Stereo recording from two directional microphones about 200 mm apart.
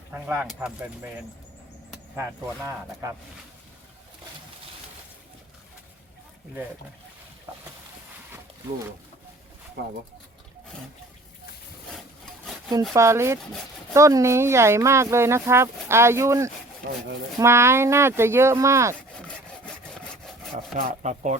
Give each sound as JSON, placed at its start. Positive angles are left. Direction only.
{"t": 0.1, "sound": "speech", "side_deg": -10}
{"t": 2.6, "sound": "speech", "side_deg": -15}
{"t": 7.5, "sound": "a sound", "side_deg": -10}
{"t": 12.2, "sound": "sawing", "side_deg": 0}
{"t": 12.9, "sound": "speech", "side_deg": -15}
{"t": 19.6, "sound": "sawing", "side_deg": 0}
{"t": 20.7, "sound": "speech", "side_deg": -35}